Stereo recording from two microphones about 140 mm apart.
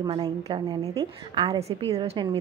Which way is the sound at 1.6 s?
45° right (ahead or behind).